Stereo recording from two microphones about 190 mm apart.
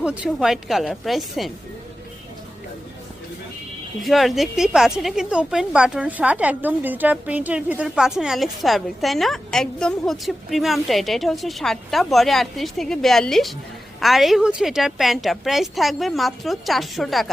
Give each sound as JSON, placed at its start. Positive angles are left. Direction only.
{"t": 0.0, "sound": "speech", "side_deg": -5}
{"t": 4.0, "sound": "speech", "side_deg": 0}